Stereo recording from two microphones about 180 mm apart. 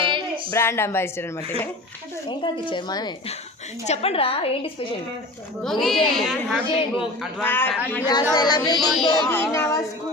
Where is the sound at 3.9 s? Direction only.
35° left (ahead or behind).